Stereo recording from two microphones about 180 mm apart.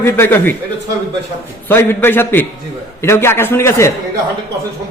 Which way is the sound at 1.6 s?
10° left (ahead or behind).